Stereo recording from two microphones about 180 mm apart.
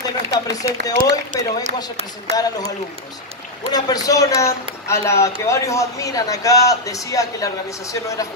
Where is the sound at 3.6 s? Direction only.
20° left (ahead or behind).